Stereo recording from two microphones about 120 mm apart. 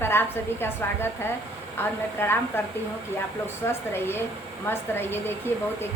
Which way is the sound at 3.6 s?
20° left (ahead or behind).